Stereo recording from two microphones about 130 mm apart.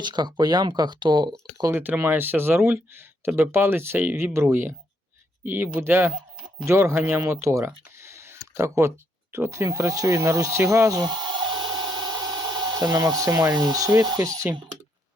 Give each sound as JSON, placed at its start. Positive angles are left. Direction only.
{"t": 0.0, "sound": "speech", "side_deg": -35}
{"t": 1.7, "sound": "speech", "side_deg": -15}